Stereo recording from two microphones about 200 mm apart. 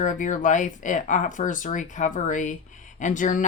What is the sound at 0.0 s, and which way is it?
Speech, 40° left (ahead or behind).